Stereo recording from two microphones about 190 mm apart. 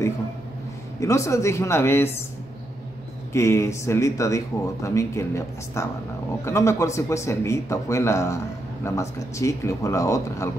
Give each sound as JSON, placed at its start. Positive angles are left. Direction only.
{"t": 0.9, "sound": "speech", "side_deg": 15}
{"t": 3.3, "sound": "speech", "side_deg": 15}